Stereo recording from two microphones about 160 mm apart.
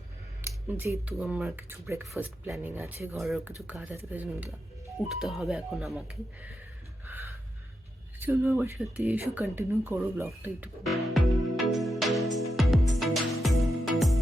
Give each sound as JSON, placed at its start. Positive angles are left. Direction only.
{"t": 0.4, "sound": "speech", "side_deg": -15}
{"t": 3.2, "sound": "speech", "side_deg": 0}
{"t": 4.9, "sound": "speech", "side_deg": 0}
{"t": 8.2, "sound": "speech", "side_deg": -15}
{"t": 10.8, "sound": "music", "side_deg": 0}